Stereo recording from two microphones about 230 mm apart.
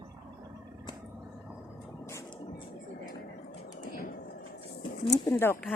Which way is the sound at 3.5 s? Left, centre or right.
Left.